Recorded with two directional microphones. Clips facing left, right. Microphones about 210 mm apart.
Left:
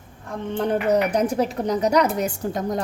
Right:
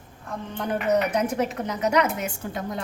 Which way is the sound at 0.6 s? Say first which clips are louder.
Left 3 dB; 30° left (ahead or behind).